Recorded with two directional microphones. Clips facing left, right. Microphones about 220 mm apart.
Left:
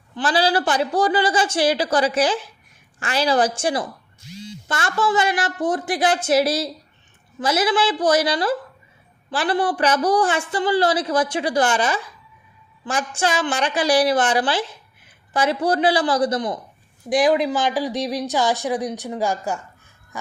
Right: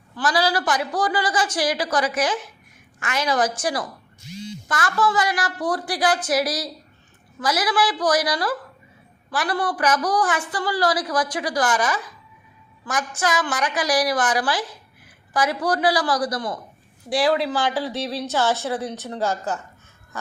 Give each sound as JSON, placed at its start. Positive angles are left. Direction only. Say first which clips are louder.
{"t": 0.2, "sound": "a woman's voice", "louder": "left 2 dB", "side_deg": 25}